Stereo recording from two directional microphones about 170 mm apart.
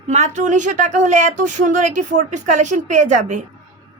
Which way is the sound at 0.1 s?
45° right (ahead or behind).